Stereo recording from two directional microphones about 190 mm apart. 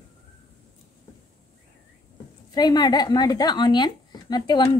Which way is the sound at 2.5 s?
20° left (ahead or behind).